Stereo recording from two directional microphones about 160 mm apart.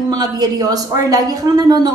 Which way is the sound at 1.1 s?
25° right (ahead or behind).